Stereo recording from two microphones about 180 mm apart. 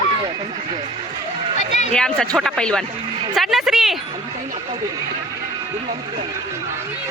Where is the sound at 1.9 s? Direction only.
5° left (ahead or behind).